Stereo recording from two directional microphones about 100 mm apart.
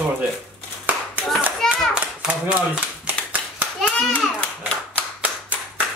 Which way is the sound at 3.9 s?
10° left (ahead or behind).